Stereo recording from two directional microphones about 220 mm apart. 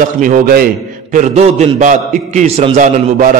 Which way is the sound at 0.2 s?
40° right (ahead or behind).